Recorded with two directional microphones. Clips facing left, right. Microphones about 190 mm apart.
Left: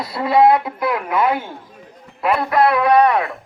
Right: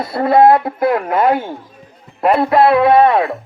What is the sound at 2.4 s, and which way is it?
Speech, 25° right (ahead or behind).